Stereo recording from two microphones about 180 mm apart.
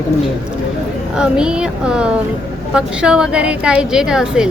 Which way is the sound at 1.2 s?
5° right (ahead or behind).